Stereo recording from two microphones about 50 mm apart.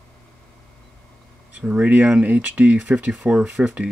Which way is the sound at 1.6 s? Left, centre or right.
Right.